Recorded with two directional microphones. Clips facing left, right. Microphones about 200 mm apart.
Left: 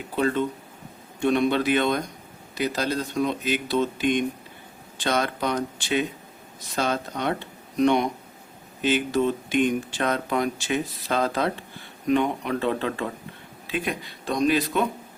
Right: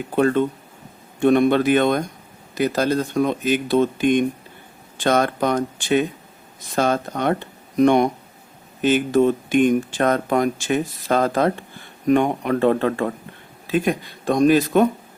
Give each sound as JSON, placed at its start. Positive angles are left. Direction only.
{"t": 1.2, "sound": "speech", "side_deg": -50}